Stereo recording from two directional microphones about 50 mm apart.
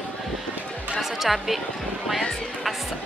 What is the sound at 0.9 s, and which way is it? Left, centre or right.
Music, centre.